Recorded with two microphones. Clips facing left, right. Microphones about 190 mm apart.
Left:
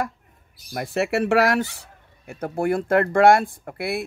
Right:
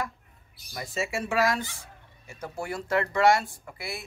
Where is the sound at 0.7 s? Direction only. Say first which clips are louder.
Left 9 dB; 65° left (ahead or behind).